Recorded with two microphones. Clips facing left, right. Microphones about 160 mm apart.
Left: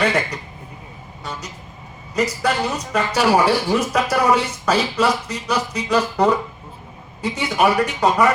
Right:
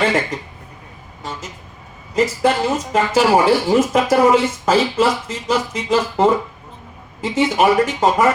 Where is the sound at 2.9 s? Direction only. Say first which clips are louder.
Right 2 dB; 25° right (ahead or behind).